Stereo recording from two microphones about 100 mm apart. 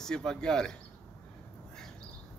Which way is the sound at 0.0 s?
5° left (ahead or behind).